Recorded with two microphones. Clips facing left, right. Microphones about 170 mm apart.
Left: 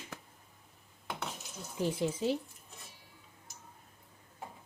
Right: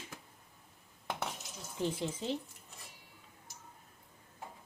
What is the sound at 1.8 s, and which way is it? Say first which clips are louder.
Speech: left 4 dB; 10° left (ahead or behind).